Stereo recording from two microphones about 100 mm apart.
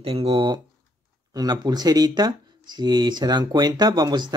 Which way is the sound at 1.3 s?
40° right (ahead or behind).